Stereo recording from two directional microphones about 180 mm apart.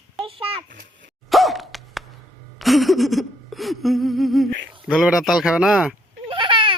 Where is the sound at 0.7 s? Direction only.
50° right (ahead or behind).